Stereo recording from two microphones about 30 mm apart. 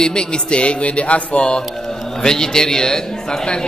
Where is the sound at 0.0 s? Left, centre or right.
Left.